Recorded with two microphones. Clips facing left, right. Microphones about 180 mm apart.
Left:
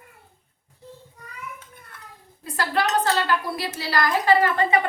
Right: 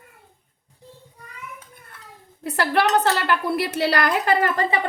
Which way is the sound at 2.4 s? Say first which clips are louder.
Right 4 dB; 70° right (ahead or behind).